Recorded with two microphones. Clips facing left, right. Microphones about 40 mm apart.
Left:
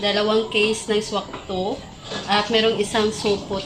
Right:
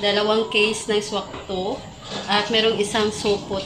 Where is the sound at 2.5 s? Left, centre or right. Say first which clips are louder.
Even; right.